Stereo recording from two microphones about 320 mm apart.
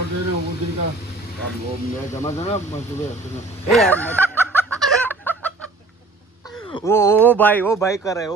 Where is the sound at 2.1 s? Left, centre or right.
Centre.